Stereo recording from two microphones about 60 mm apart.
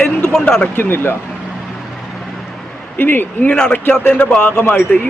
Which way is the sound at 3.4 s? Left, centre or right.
Centre.